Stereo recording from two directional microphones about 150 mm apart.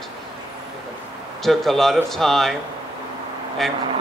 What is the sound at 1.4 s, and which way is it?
Speech, centre (ahead or behind).